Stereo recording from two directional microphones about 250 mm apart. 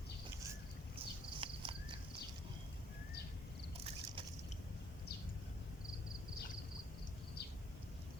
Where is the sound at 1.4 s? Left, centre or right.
Centre.